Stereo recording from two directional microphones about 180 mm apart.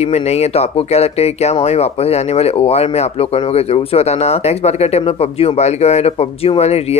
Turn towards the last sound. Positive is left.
turn(degrees=35)  # may be behind; listen again after turning